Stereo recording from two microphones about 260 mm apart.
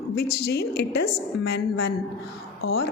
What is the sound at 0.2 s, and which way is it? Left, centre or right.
Speech, left.